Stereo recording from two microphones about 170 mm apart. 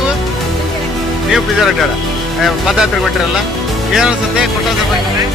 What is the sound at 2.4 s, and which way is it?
Speech, centre (ahead or behind).